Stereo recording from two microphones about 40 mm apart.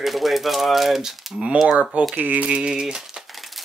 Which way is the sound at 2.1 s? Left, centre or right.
Right.